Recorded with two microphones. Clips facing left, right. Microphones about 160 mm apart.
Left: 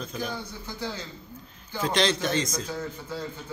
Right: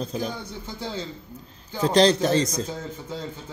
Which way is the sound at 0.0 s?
35° right (ahead or behind).